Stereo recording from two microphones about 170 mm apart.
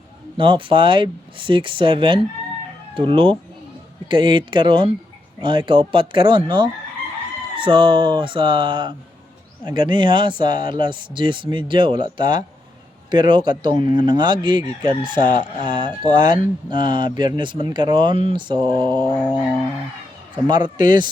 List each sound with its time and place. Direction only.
0.3 s speech: 30° right (ahead or behind)
19.1 s music: 5° left (ahead or behind)
20.5 s speech: 25° right (ahead or behind)